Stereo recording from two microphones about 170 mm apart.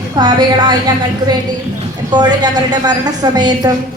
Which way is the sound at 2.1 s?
25° right (ahead or behind).